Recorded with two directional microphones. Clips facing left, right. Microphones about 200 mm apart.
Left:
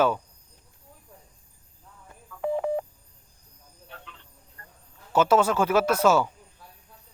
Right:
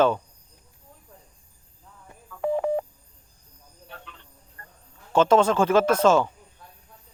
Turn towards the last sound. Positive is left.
turn(degrees=5)  # may be behind; listen again after turning